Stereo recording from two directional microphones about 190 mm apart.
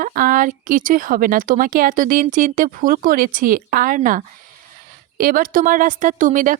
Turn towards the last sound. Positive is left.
turn(degrees=-45)  # may be behind; listen again after turning